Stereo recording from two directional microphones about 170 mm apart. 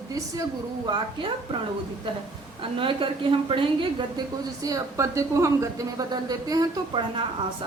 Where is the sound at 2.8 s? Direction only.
30° right (ahead or behind).